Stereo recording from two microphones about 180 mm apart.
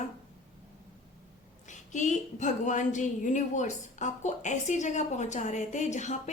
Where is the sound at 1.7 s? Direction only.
45° left (ahead or behind).